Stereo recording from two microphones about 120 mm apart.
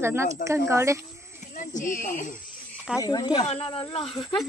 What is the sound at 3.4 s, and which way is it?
Speech, 50° left (ahead or behind).